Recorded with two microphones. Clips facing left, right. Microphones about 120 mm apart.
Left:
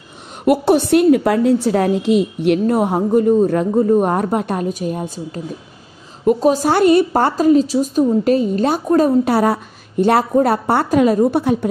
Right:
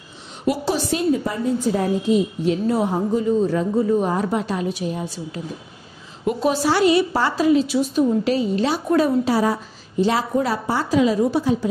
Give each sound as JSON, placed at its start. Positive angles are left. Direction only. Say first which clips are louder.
{"t": 0.5, "sound": "a woman's voice", "louder": "left 8 dB", "side_deg": 60}
{"t": 9.3, "sound": "a woman's voice", "louder": "left 4 dB", "side_deg": 60}